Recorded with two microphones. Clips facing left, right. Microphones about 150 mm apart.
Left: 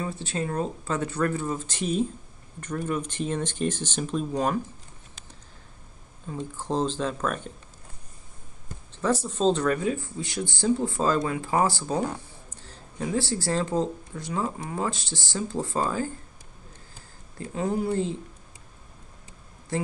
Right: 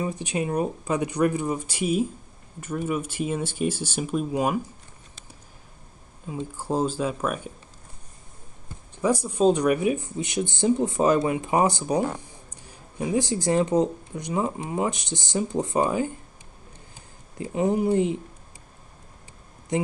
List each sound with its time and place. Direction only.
0.0 s speech: 15° right (ahead or behind)
6.2 s speech: 10° right (ahead or behind)
8.9 s speech: 10° right (ahead or behind)
17.4 s speech: 20° right (ahead or behind)
19.7 s speech: 20° right (ahead or behind)